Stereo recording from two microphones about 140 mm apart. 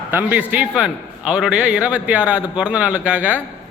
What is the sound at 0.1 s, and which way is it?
A man's voice, 10° right (ahead or behind).